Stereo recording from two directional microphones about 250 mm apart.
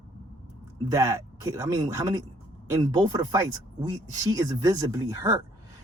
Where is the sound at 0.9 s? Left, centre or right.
Centre.